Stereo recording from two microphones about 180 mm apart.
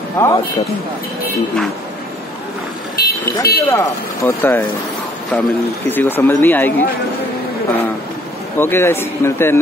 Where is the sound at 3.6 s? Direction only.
15° left (ahead or behind).